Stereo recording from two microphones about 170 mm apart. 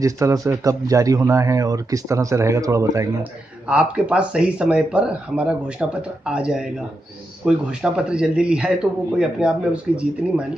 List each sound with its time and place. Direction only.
0.0 s speech: 20° right (ahead or behind)
3.6 s speech: 5° right (ahead or behind)